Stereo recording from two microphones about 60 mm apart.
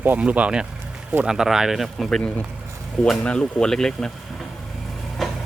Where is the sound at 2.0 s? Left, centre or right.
Centre.